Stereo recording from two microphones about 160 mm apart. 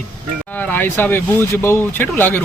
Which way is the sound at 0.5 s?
10° left (ahead or behind).